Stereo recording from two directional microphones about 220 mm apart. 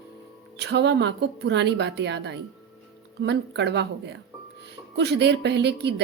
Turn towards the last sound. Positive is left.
turn(degrees=-50)  # may be behind; listen again after turning